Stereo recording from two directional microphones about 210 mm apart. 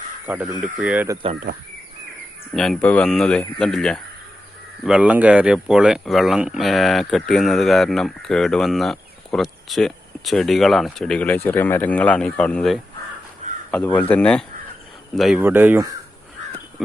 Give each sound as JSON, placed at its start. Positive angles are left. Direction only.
{"t": 0.3, "sound": "speech", "side_deg": -5}
{"t": 2.6, "sound": "speech", "side_deg": 5}